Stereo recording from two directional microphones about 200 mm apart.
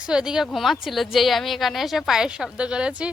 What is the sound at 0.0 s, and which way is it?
Speech, 5° right (ahead or behind).